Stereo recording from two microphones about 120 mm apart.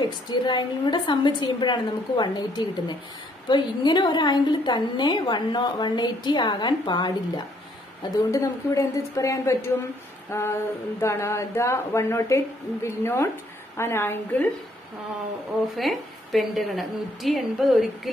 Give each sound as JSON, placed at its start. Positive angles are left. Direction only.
{"t": 0.0, "sound": "a woman's voice", "side_deg": 40}
{"t": 8.0, "sound": "a woman's voice", "side_deg": 30}
{"t": 15.7, "sound": "a woman's voice", "side_deg": 0}